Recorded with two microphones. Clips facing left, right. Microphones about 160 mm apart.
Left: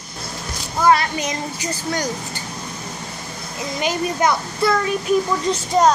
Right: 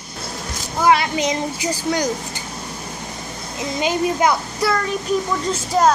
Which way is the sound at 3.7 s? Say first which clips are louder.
Right 2 dB; 20° right (ahead or behind).